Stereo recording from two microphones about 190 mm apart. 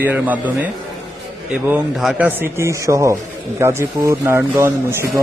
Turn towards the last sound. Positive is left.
turn(degrees=-15)  # may be behind; listen again after turning